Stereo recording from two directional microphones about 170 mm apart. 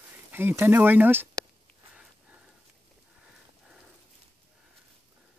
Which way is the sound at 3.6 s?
5° right (ahead or behind).